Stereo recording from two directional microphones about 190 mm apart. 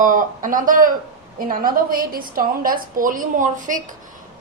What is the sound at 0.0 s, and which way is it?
A woman's voice, 45° right (ahead or behind).